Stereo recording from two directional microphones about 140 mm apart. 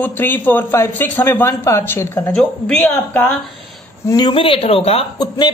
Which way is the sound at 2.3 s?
10° left (ahead or behind).